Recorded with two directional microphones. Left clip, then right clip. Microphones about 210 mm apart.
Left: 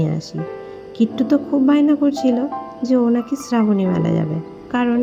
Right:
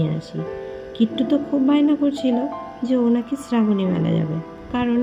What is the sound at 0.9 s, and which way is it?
A woman's voice, 15° left (ahead or behind).